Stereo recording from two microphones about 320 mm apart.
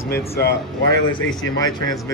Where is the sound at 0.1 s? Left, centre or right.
Left.